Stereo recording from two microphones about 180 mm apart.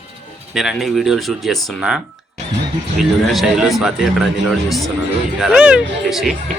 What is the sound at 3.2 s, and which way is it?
Speech, centre (ahead or behind).